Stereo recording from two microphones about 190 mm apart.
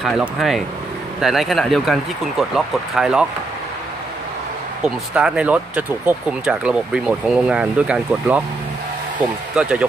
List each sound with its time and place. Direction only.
0.0 s speech: centre (ahead or behind)
4.8 s speech: 5° right (ahead or behind)
9.6 s speech: 5° right (ahead or behind)